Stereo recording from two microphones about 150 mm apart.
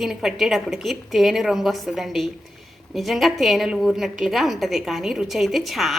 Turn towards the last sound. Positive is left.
turn(degrees=0)  # may be behind; listen again after turning